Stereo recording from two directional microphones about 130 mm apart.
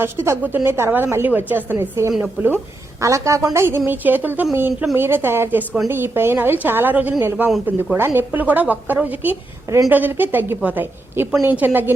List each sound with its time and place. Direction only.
0.0 s a woman's voice: 20° right (ahead or behind)